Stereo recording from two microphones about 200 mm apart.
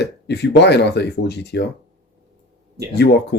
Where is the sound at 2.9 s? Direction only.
55° left (ahead or behind).